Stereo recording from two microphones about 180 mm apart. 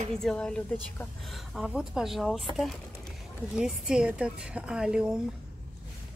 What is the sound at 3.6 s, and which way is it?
A woman's voice, 5° right (ahead or behind).